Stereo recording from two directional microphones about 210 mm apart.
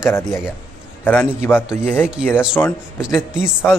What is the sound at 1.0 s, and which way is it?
Speech, 5° left (ahead or behind).